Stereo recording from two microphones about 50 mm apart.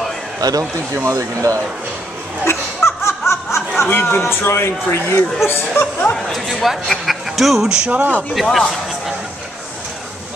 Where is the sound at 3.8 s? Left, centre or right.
Left.